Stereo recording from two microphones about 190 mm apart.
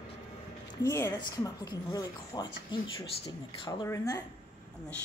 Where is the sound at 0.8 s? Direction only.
15° left (ahead or behind).